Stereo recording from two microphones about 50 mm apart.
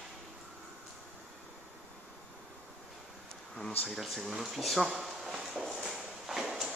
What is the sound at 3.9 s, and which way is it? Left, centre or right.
Speech, centre.